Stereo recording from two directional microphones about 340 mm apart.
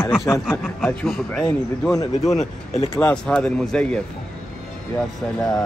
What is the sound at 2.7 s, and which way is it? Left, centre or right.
Speech, centre.